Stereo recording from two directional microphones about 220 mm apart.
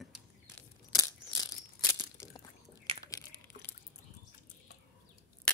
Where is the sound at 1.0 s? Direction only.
15° left (ahead or behind).